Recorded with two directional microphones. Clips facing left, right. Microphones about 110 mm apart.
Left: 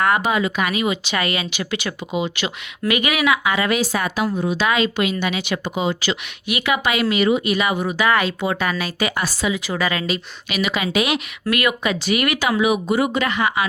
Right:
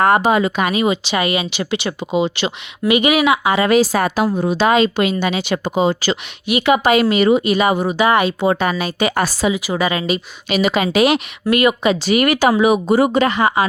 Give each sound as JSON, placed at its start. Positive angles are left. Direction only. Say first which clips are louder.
{"t": 0.0, "sound": "speech", "louder": "right 5 dB", "side_deg": -30}
{"t": 9.1, "sound": "speech", "louder": "right 6 dB", "side_deg": -45}
{"t": 9.5, "sound": "speech", "louder": "right 4 dB", "side_deg": -15}
{"t": 10.5, "sound": "speech", "louder": "right 5 dB", "side_deg": -35}